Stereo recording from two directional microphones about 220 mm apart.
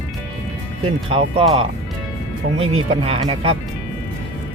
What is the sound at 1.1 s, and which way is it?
Speech, 25° right (ahead or behind).